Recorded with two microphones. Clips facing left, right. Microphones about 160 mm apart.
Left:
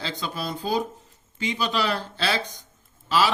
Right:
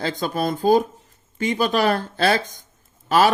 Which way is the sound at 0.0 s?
50° right (ahead or behind).